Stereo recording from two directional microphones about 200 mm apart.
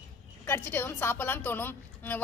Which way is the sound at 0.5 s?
10° left (ahead or behind).